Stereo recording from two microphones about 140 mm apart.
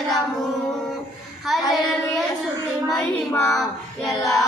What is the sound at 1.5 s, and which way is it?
Child singing, centre (ahead or behind).